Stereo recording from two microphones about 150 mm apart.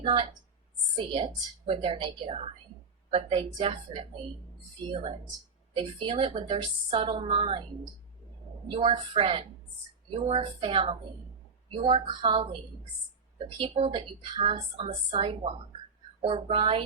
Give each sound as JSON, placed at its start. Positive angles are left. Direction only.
{"t": 0.0, "sound": "speech", "side_deg": -35}
{"t": 8.6, "sound": "speech", "side_deg": -35}
{"t": 13.6, "sound": "speech", "side_deg": -40}